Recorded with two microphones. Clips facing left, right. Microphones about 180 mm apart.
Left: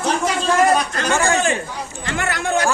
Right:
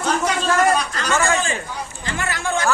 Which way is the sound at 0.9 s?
60° left (ahead or behind).